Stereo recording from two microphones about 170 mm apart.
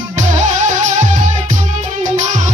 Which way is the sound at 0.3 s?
45° right (ahead or behind).